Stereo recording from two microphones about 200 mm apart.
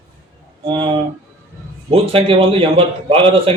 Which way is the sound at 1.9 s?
30° right (ahead or behind).